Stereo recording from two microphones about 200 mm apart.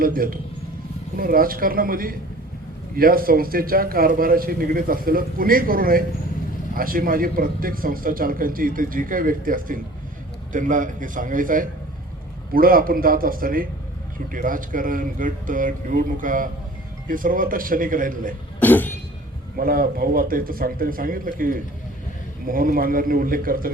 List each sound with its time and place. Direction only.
0.0 s a man's voice: 45° right (ahead or behind)
18.6 s cough: 10° left (ahead or behind)
19.5 s a man's voice: 45° right (ahead or behind)